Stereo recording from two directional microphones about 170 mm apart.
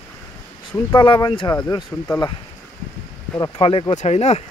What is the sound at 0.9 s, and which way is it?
Speech, 25° left (ahead or behind).